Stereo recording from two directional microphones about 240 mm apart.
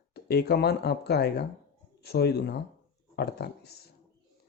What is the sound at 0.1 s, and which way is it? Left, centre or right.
Speech, left.